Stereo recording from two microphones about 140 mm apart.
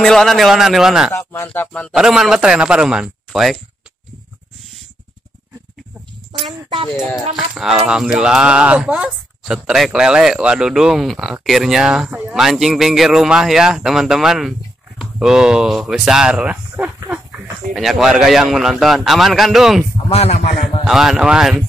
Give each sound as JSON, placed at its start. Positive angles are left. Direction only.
{"t": 0.0, "sound": "speech", "side_deg": 5}
{"t": 1.1, "sound": "speech", "side_deg": 15}
{"t": 2.0, "sound": "speech", "side_deg": -5}
{"t": 7.2, "sound": "speech", "side_deg": 0}
{"t": 17.7, "sound": "speech", "side_deg": 0}
{"t": 20.1, "sound": "a man's voice", "side_deg": 50}
{"t": 20.8, "sound": "speech", "side_deg": -5}